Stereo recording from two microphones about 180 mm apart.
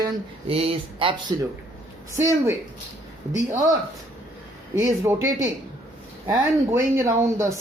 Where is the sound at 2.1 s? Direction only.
15° right (ahead or behind).